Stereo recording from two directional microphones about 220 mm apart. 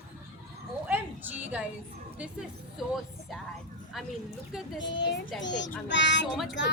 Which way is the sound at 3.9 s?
Centre (ahead or behind).